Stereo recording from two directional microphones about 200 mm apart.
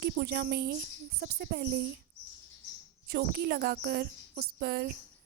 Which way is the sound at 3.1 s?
55° right (ahead or behind).